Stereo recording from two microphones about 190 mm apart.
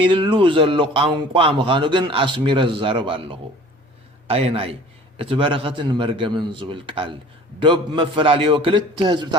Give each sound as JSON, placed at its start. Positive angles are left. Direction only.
{"t": 0.0, "sound": "speech", "side_deg": -25}